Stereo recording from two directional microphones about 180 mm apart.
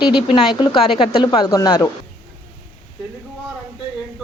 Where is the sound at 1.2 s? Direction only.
25° left (ahead or behind).